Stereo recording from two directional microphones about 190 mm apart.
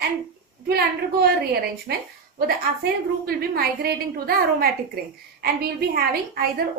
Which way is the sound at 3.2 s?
55° right (ahead or behind).